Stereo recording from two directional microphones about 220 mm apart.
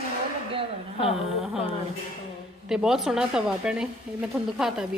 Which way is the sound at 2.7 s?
5° right (ahead or behind).